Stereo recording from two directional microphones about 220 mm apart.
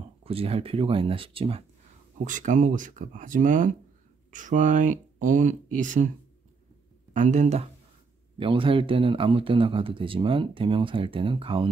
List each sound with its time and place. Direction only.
0.2 s speech: 25° right (ahead or behind)
2.2 s speech: 35° right (ahead or behind)
7.2 s speech: 35° right (ahead or behind)